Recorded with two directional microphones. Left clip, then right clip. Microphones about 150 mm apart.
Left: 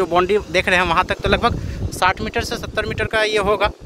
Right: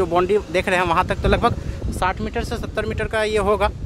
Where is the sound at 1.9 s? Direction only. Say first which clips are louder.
Left 4 dB; 10° left (ahead or behind).